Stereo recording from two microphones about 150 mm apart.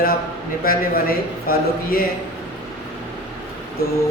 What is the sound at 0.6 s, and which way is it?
A man's voice, 75° left (ahead or behind).